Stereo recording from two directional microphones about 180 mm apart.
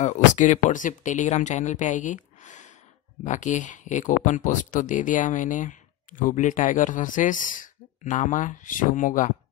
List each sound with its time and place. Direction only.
0.0 s speech: 40° left (ahead or behind)